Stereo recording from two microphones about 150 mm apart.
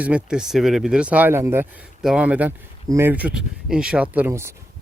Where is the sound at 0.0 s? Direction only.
10° right (ahead or behind).